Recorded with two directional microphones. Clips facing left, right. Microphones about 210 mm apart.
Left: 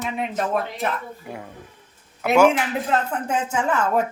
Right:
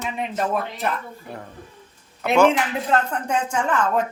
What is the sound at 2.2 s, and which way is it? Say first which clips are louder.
Speech: left 1 dB; 10° left (ahead or behind).